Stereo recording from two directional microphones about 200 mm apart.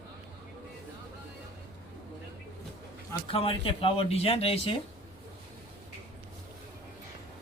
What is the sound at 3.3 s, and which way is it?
Speech, 25° left (ahead or behind).